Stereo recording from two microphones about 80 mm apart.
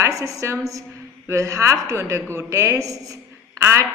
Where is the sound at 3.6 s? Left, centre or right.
Right.